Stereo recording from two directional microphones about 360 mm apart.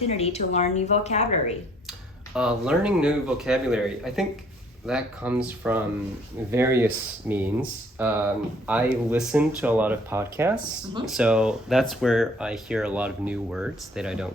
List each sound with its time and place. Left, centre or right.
0.0 s speech: centre
1.9 s speech: centre